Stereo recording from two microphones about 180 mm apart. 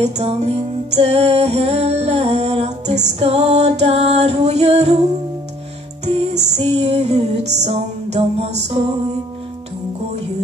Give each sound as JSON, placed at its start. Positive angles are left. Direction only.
{"t": 0.0, "sound": "music", "side_deg": -35}
{"t": 6.3, "sound": "music", "side_deg": -35}